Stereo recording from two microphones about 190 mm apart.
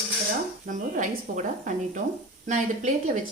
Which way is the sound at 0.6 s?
45° right (ahead or behind).